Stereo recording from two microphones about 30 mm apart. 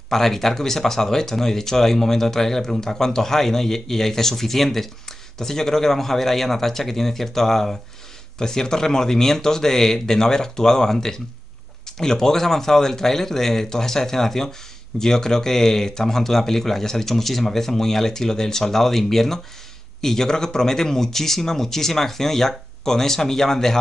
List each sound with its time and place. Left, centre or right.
0.1 s speech: centre
8.4 s speech: left